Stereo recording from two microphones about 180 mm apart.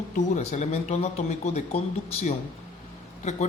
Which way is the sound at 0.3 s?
40° left (ahead or behind).